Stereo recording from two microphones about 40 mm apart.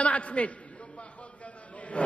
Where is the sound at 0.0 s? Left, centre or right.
Left.